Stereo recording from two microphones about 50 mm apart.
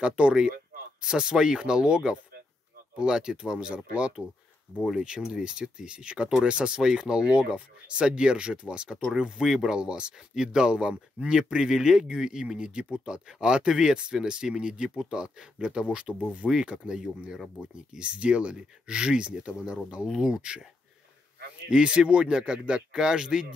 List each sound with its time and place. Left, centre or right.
0.0 s speech: right
9.8 s speech: centre
21.6 s speech: centre